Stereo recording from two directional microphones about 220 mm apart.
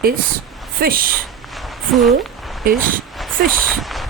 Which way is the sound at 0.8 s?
40° right (ahead or behind).